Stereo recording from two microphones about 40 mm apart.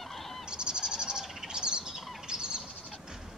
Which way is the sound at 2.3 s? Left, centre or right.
Centre.